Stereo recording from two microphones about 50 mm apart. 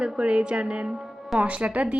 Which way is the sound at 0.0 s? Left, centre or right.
Centre.